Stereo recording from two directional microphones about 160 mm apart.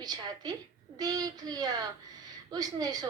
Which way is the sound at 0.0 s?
25° right (ahead or behind).